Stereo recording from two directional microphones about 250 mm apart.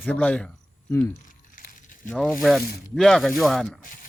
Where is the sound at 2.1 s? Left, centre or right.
Centre.